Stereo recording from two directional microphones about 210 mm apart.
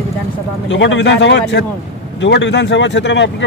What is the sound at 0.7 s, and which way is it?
Speech, 60° left (ahead or behind).